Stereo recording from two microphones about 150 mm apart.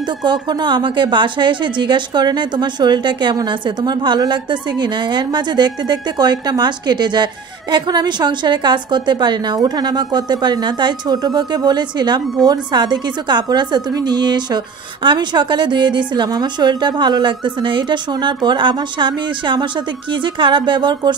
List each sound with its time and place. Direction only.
0.2 s a woman's voice: 30° right (ahead or behind)